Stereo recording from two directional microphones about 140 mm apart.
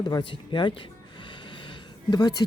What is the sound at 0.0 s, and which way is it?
Speech, 35° left (ahead or behind).